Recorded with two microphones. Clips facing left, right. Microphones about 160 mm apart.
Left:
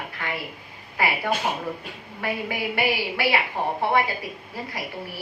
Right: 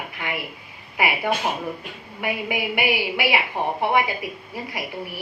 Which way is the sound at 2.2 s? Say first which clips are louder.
Right 2 dB; 15° right (ahead or behind).